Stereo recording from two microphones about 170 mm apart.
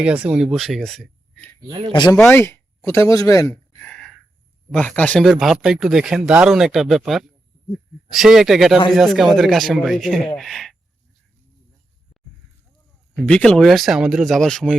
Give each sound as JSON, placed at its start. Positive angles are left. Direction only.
{"t": 0.0, "sound": "speech", "side_deg": -5}
{"t": 1.6, "sound": "a man's voice", "side_deg": -25}
{"t": 1.9, "sound": "speech", "side_deg": 25}
{"t": 2.1, "sound": "speech", "side_deg": 10}
{"t": 3.8, "sound": "a sound", "side_deg": 5}
{"t": 4.7, "sound": "speech", "side_deg": 10}
{"t": 13.1, "sound": "speech", "side_deg": 5}